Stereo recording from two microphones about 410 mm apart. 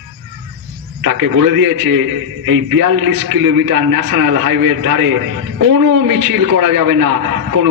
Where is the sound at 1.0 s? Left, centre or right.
Right.